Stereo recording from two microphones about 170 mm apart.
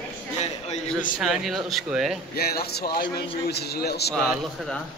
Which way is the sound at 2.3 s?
65° left (ahead or behind).